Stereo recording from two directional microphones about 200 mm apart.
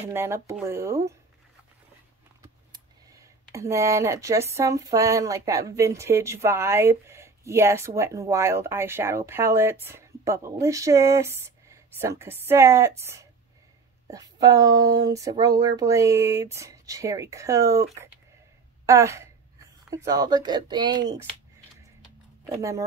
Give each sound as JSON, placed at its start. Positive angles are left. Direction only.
{"t": 0.0, "sound": "speech", "side_deg": -10}
{"t": 2.7, "sound": "speech", "side_deg": -15}
{"t": 18.9, "sound": "speech", "side_deg": -15}
{"t": 22.6, "sound": "speech", "side_deg": -15}